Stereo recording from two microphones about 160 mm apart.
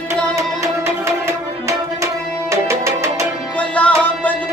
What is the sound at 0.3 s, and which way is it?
Music, 20° right (ahead or behind).